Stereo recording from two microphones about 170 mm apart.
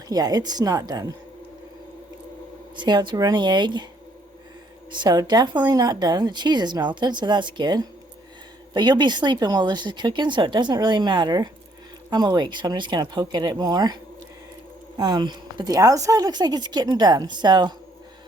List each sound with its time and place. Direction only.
0.1 s speech: 20° right (ahead or behind)
2.7 s speech: 25° right (ahead or behind)
4.9 s speech: 25° right (ahead or behind)
14.9 s speech: 25° right (ahead or behind)